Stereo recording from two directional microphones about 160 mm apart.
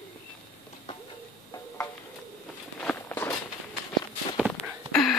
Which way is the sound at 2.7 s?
10° left (ahead or behind).